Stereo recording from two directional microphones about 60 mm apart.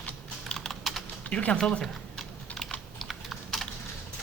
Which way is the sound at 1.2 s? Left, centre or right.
Left.